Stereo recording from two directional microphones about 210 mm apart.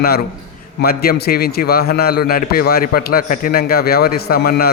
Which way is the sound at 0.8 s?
50° left (ahead or behind).